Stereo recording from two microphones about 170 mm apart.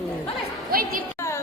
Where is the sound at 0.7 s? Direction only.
60° right (ahead or behind).